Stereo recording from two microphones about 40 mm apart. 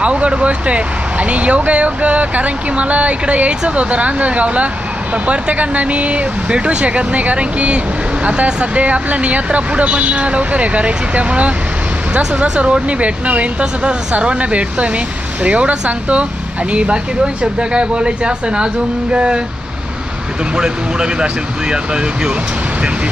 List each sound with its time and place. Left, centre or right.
0.0 s speech: right
20.6 s speech: right